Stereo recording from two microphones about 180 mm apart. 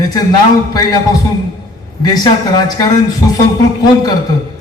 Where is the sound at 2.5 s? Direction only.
20° left (ahead or behind).